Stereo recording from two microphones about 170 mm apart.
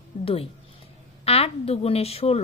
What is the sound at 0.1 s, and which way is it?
A woman's voice, 45° left (ahead or behind).